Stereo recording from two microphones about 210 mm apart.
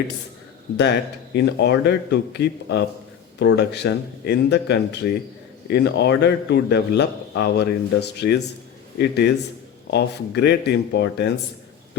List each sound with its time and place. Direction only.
0.8 s a man's voice: 55° left (ahead or behind)